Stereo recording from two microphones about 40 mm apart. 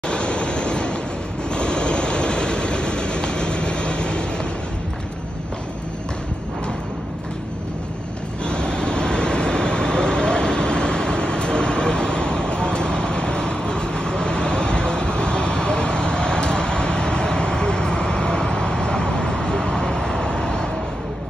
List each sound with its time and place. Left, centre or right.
0.1 s vehicle: left
8.5 s vehicle: left